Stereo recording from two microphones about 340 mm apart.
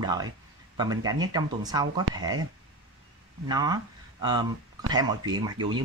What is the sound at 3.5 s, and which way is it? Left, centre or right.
Speech, centre.